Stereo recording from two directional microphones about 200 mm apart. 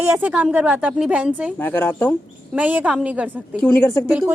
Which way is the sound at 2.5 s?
5° right (ahead or behind).